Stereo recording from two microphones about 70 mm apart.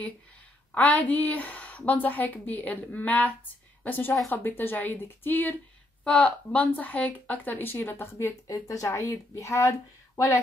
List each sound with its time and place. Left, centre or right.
0.7 s a woman's voice: left
6.0 s speech: centre; by 8.4 s left
8.5 s speech: left